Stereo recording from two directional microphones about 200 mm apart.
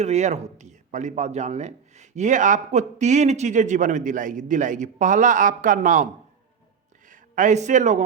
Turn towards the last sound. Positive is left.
turn(degrees=-35)  # may be behind; listen again after turning